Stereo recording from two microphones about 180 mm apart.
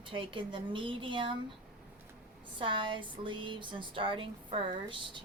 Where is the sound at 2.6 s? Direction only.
25° right (ahead or behind).